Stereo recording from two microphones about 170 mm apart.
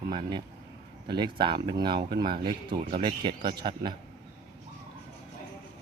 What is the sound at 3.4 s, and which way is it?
Speech, 70° right (ahead or behind).